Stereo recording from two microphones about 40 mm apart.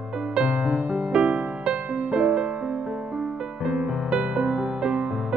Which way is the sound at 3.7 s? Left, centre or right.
Right.